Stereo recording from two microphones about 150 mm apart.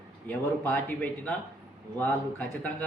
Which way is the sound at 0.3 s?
10° left (ahead or behind).